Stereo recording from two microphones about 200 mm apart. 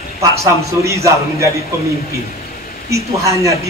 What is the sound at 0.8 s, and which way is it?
Speech, 15° right (ahead or behind).